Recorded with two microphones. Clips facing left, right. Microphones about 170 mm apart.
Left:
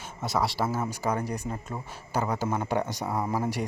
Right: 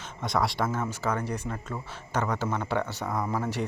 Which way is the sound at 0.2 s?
5° left (ahead or behind).